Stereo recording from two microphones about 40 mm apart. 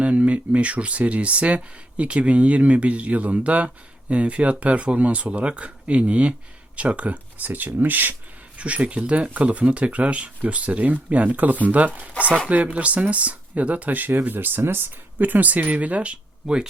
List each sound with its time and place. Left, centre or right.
0.0 s speech: right
8.5 s speech: right
14.1 s speech: right
15.2 s speech: right
16.4 s speech: centre